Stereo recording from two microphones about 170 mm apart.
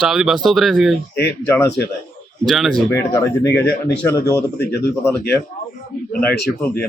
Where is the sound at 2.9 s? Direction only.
15° left (ahead or behind).